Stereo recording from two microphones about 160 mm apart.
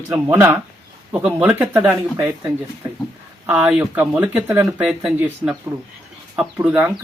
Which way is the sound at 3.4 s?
10° right (ahead or behind).